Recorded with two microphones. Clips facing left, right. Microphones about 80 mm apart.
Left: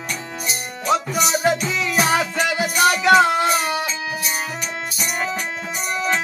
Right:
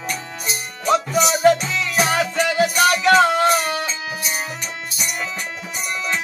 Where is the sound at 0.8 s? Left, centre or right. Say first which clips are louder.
Right 2 dB; centre.